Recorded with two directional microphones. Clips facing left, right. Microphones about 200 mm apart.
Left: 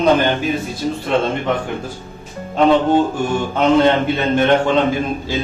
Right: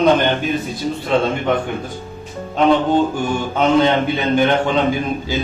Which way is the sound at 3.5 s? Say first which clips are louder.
Left 1 dB; centre (ahead or behind).